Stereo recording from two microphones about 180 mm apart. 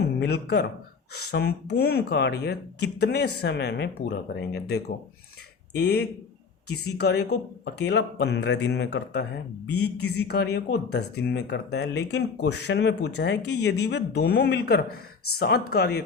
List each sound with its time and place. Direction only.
0.2 s speech: 65° left (ahead or behind)